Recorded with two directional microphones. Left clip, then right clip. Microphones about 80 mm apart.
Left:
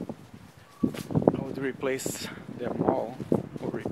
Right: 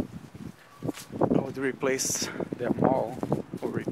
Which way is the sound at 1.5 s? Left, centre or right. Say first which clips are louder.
Right 2 dB; right.